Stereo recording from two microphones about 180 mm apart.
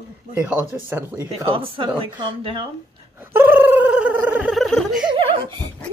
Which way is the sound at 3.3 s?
10° right (ahead or behind).